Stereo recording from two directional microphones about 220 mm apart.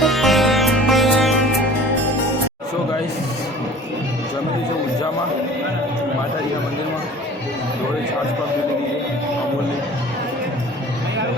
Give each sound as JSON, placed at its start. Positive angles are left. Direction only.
{"t": 0.0, "sound": "music", "side_deg": 0}